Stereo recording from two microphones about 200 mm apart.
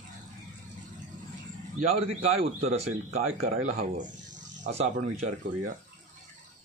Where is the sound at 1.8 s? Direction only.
30° right (ahead or behind).